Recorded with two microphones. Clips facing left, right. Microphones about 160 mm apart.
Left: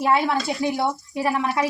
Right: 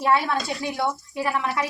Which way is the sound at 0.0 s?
20° left (ahead or behind).